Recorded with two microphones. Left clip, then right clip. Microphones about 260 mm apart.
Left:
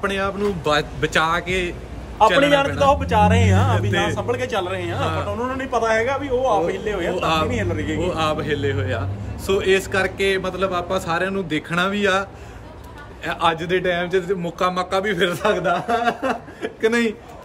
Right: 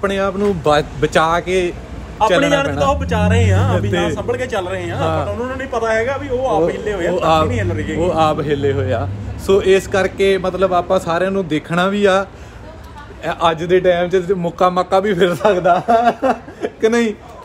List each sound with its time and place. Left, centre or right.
0.0 s a man's voice: centre
2.9 s a man's voice: left
5.0 s a man's voice: centre
5.3 s a man's voice: left
7.2 s a man's voice: centre
7.4 s a man's voice: left
8.0 s a man's voice: centre